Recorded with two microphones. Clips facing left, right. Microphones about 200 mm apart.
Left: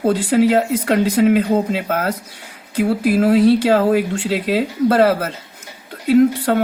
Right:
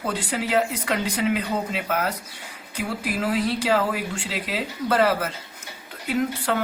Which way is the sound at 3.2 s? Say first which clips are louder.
Left 11 dB; 60° left (ahead or behind).